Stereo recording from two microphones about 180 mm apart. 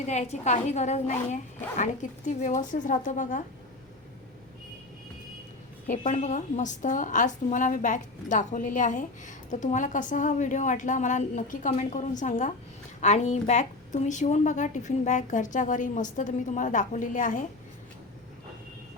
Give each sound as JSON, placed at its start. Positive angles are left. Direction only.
{"t": 0.0, "sound": "a woman's voice", "side_deg": 40}
{"t": 5.9, "sound": "a woman's voice", "side_deg": 40}